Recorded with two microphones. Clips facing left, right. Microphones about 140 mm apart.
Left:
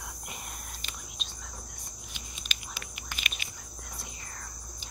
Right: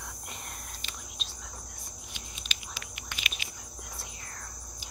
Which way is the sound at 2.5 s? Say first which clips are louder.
Left 1 dB; 45° left (ahead or behind).